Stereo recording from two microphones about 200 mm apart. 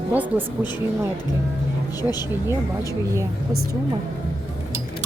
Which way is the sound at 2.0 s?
20° left (ahead or behind).